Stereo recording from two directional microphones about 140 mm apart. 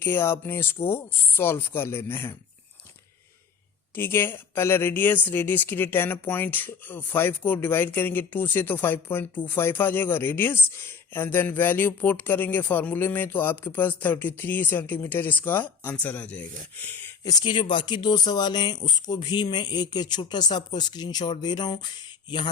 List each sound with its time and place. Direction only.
0.0 s speech: 15° left (ahead or behind)
3.9 s speech: 15° left (ahead or behind)
17.4 s speech: 35° left (ahead or behind)